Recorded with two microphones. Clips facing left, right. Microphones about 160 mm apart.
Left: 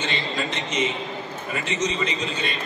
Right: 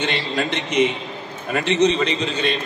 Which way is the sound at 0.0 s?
65° right (ahead or behind).